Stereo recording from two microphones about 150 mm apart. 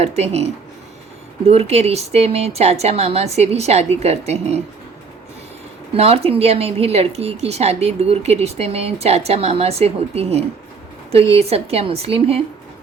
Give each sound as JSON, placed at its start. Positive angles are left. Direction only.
{"t": 0.0, "sound": "speech", "side_deg": -45}
{"t": 5.9, "sound": "a woman's voice", "side_deg": -40}